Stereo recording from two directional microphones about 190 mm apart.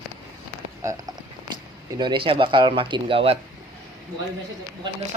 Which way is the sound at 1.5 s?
20° right (ahead or behind).